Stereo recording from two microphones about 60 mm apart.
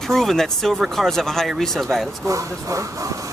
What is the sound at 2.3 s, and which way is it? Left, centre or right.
Speech, right.